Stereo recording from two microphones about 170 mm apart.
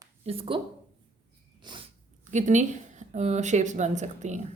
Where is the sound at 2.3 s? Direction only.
45° right (ahead or behind).